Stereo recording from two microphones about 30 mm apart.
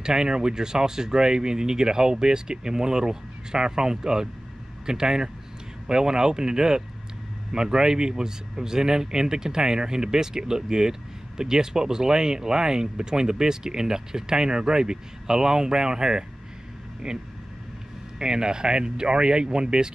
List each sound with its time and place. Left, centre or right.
0.0 s speech: right
18.2 s speech: right